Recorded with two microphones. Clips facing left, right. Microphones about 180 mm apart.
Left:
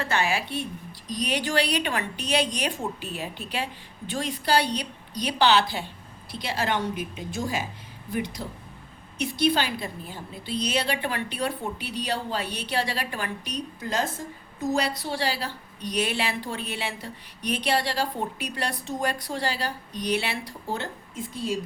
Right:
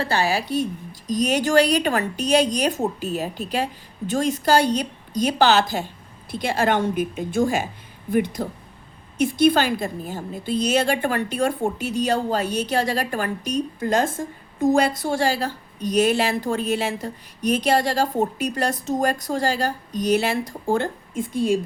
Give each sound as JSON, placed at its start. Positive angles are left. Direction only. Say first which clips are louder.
{"t": 0.0, "sound": "a woman's voice", "louder": "right 4 dB", "side_deg": -35}